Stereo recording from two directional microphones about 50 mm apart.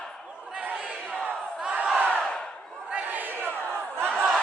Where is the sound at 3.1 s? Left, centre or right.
Right.